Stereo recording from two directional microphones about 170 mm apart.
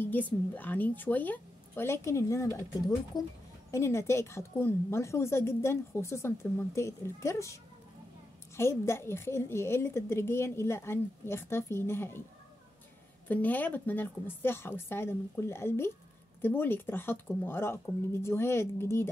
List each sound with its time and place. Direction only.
0.0 s a woman's voice: 10° left (ahead or behind)
8.5 s a woman's voice: 15° left (ahead or behind)
13.3 s a woman's voice: 10° left (ahead or behind)